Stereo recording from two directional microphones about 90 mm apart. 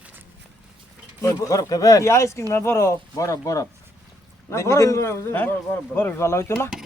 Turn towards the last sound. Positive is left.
turn(degrees=30)  # may be behind; listen again after turning